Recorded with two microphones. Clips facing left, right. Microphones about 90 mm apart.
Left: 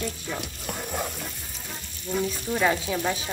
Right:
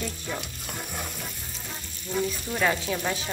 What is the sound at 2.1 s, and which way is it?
Speech, centre (ahead or behind).